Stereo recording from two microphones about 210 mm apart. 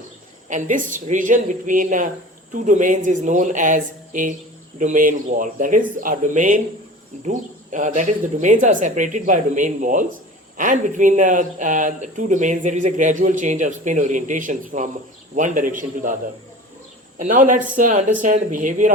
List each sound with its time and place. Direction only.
0.5 s speech: 40° right (ahead or behind)
17.2 s speech: 40° right (ahead or behind)